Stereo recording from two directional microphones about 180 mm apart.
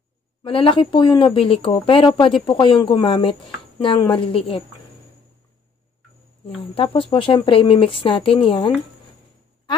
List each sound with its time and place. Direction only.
0.4 s speech: 30° left (ahead or behind)
6.4 s speech: 30° left (ahead or behind)